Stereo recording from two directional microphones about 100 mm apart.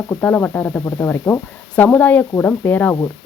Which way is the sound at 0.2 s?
15° left (ahead or behind).